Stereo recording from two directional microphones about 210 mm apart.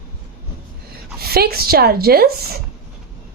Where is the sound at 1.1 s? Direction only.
45° right (ahead or behind).